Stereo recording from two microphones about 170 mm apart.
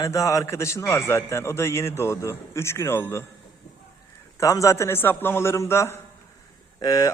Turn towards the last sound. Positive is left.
turn(degrees=20)  # may be behind; listen again after turning